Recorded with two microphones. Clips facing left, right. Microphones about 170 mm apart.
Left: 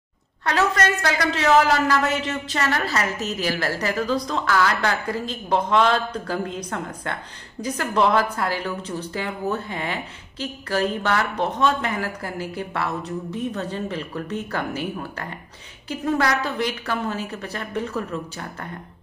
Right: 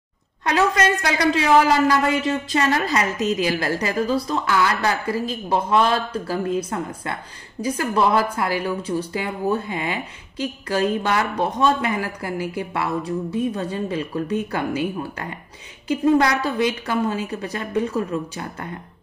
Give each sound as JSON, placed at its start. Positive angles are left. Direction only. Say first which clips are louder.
{"t": 0.5, "sound": "a man's voice", "louder": "right 2 dB", "side_deg": -15}